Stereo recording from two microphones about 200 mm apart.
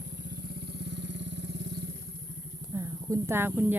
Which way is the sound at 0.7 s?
60° right (ahead or behind).